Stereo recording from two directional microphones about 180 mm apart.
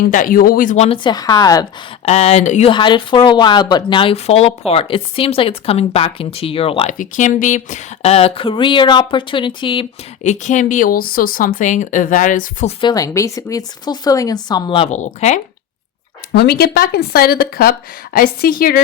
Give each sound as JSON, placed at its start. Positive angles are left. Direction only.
{"t": 0.0, "sound": "speech", "side_deg": 50}
{"t": 0.9, "sound": "speech", "side_deg": 25}
{"t": 2.0, "sound": "speech", "side_deg": 35}
{"t": 6.9, "sound": "speech", "side_deg": 45}
{"t": 10.2, "sound": "speech", "side_deg": 40}
{"t": 12.8, "sound": "speech", "side_deg": 20}
{"t": 16.3, "sound": "speech", "side_deg": 65}